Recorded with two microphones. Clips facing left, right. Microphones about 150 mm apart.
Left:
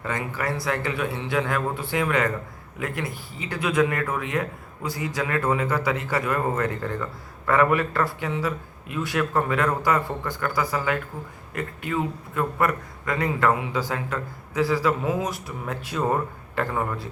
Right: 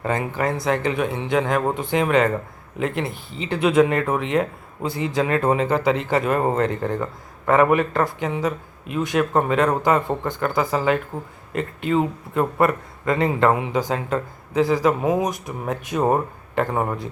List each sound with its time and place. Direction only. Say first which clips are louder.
0.0 s speech: right 5 dB; 25° right (ahead or behind)